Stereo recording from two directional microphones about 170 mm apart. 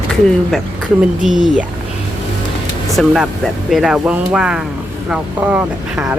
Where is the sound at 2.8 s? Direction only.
Centre (ahead or behind).